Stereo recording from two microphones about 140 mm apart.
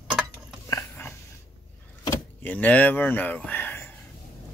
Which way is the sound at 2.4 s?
10° left (ahead or behind).